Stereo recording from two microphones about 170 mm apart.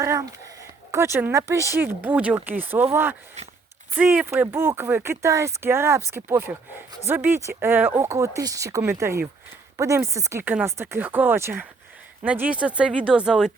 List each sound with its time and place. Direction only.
0.0 s speech: 20° right (ahead or behind)